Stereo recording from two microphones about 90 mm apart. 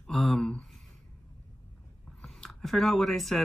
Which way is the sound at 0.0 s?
Centre (ahead or behind).